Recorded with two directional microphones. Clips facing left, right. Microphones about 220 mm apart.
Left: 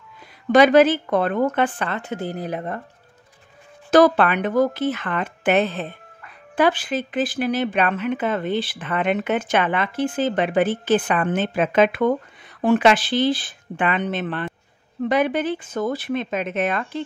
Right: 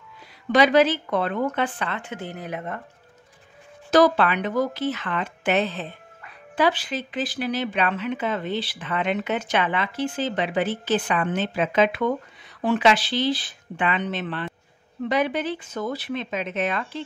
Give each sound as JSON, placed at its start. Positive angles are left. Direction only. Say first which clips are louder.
{"t": 0.5, "sound": "speech", "louder": "left 4 dB", "side_deg": 50}
{"t": 3.9, "sound": "speech", "louder": "left 3 dB", "side_deg": 55}